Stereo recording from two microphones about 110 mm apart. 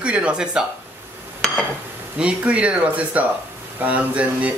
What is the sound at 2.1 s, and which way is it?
Speech, 10° right (ahead or behind).